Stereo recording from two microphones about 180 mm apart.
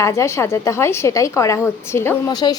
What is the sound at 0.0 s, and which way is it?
A woman's voice, 15° left (ahead or behind).